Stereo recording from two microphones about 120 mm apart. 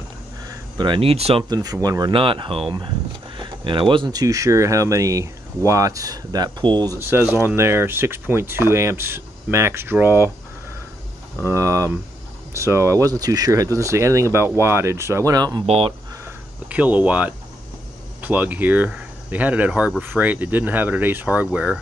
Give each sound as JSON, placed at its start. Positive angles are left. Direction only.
{"t": 0.5, "sound": "speech", "side_deg": -40}
{"t": 1.5, "sound": "speech", "side_deg": -30}
{"t": 3.3, "sound": "a sound", "side_deg": -40}
{"t": 3.9, "sound": "speech", "side_deg": -35}
{"t": 7.0, "sound": "speech", "side_deg": -20}
{"t": 11.4, "sound": "speech", "side_deg": -25}
{"t": 15.6, "sound": "speech", "side_deg": -60}
{"t": 16.6, "sound": "speech", "side_deg": -10}